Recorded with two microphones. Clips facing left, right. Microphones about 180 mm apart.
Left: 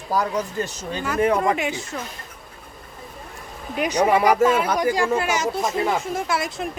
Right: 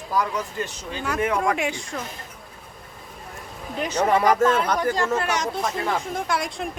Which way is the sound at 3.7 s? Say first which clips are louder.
Left 2 dB; 15° left (ahead or behind).